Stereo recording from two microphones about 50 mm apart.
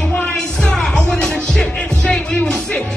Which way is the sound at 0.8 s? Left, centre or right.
Centre.